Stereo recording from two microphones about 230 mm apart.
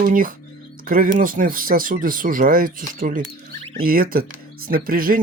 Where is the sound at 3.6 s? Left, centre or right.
Right.